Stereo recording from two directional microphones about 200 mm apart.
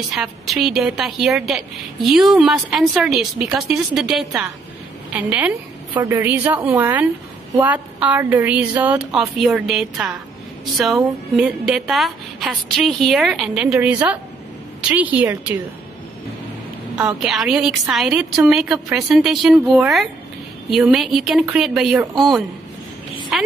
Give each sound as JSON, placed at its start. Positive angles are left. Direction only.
{"t": 0.1, "sound": "a woman's voice", "side_deg": 0}
{"t": 16.9, "sound": "a woman's voice", "side_deg": -5}